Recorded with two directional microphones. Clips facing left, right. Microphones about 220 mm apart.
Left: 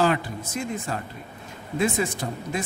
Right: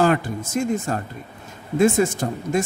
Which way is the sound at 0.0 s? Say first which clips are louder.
Right 4 dB; 45° right (ahead or behind).